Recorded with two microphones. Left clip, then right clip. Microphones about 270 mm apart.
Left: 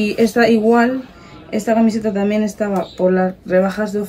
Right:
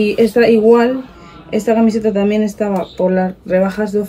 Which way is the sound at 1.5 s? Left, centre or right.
Left.